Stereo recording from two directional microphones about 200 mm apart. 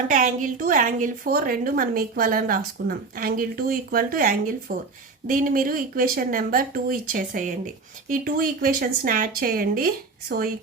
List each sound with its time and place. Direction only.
0.1 s a woman's voice: 40° right (ahead or behind)